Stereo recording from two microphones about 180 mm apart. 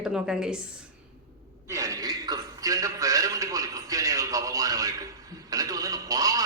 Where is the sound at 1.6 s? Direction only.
15° right (ahead or behind).